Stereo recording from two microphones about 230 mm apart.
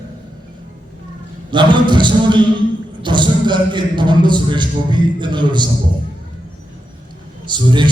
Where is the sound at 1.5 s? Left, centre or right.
Centre.